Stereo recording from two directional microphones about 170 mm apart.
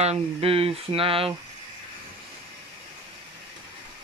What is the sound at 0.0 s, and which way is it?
Speech, 35° right (ahead or behind).